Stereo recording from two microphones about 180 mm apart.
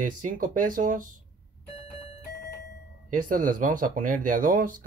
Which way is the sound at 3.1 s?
45° right (ahead or behind).